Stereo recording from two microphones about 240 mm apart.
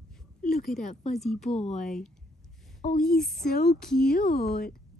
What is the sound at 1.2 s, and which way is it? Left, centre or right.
Speech, centre.